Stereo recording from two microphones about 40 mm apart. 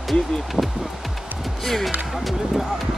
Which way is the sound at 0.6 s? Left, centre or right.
Right.